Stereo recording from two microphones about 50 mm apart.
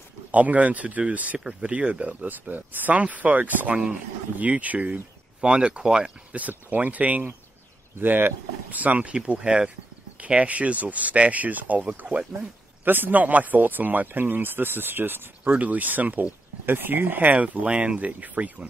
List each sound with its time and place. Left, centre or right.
0.3 s speech: right
2.2 s speech: right; by 6.1 s centre
6.3 s speech: right
12.8 s speech: right
15.5 s speech: right